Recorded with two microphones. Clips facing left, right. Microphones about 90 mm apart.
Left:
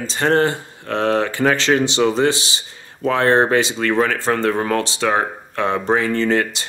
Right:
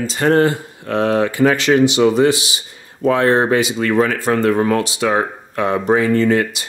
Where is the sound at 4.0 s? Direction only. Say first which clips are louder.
Right 2 dB; 35° right (ahead or behind).